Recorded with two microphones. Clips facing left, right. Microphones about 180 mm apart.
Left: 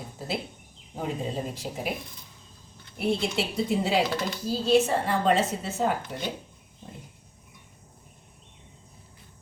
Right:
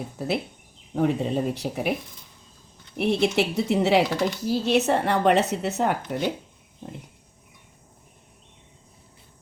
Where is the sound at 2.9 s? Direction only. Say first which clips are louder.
Right 5 dB; 70° right (ahead or behind).